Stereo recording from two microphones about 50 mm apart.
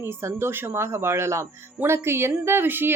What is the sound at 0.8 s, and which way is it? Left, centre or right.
A woman's voice, right.